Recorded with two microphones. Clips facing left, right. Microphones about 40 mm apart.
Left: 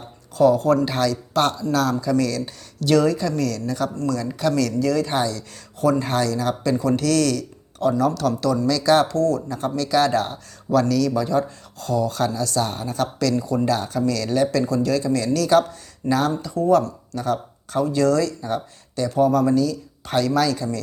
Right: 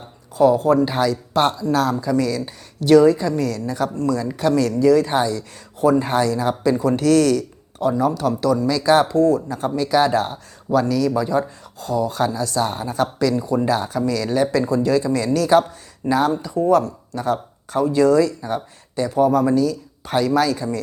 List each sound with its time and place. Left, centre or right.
0.3 s speech: centre